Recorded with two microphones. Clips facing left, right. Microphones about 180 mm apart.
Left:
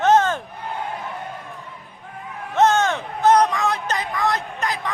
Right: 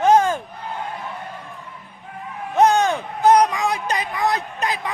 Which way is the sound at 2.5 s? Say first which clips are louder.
Right 1 dB; 15° right (ahead or behind).